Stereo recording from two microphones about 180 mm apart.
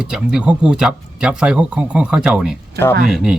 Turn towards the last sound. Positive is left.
turn(degrees=0)  # may be behind; listen again after turning